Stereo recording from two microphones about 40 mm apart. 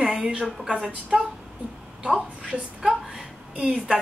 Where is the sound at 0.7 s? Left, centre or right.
Centre.